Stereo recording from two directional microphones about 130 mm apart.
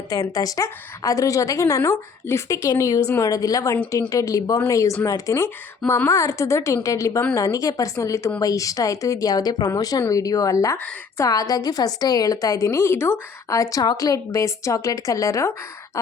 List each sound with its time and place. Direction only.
0.1 s a woman's voice: 25° left (ahead or behind)